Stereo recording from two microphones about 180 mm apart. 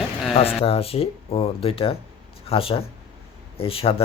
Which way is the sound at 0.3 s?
35° left (ahead or behind).